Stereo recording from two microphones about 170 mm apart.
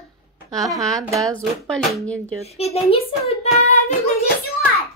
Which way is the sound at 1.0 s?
20° right (ahead or behind).